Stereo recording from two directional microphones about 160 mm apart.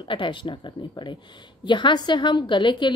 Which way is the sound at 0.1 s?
30° left (ahead or behind).